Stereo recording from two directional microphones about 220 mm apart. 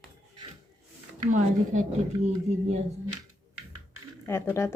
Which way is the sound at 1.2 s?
35° right (ahead or behind).